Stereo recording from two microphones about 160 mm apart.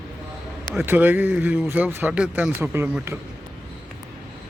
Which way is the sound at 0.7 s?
10° right (ahead or behind).